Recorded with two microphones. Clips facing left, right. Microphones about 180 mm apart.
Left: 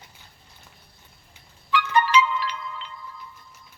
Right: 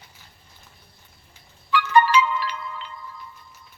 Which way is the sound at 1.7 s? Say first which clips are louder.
Right 2 dB; 50° right (ahead or behind).